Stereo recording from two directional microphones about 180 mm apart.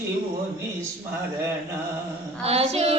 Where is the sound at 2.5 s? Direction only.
35° right (ahead or behind).